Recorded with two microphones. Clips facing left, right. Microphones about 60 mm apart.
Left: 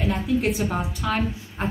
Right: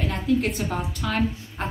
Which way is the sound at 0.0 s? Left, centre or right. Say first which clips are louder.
Left 1 dB; centre.